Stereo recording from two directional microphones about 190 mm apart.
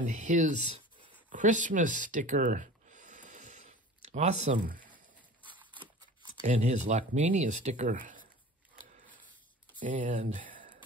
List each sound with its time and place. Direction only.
0.0 s speech: 40° right (ahead or behind)
1.3 s a sound: 40° right (ahead or behind)
6.4 s speech: 40° right (ahead or behind)
9.8 s speech: 45° right (ahead or behind)